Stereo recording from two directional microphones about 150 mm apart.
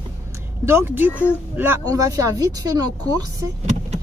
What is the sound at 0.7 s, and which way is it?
Speech, 15° right (ahead or behind).